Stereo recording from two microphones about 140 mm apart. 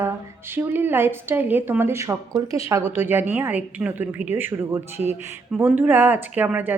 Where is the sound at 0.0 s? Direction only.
15° right (ahead or behind).